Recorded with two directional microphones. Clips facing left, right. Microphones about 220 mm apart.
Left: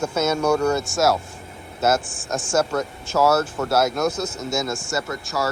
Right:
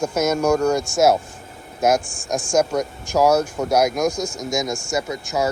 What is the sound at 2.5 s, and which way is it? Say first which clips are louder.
Speech: right 2 dB; 15° right (ahead or behind).